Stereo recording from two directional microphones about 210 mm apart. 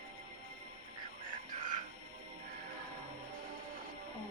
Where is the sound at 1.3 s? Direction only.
35° right (ahead or behind).